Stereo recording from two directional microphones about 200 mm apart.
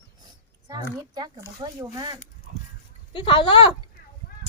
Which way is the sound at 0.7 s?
20° right (ahead or behind).